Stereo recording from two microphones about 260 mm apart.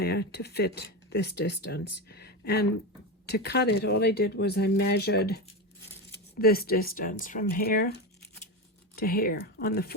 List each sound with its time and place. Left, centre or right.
0.0 s speech: left
6.4 s speech: left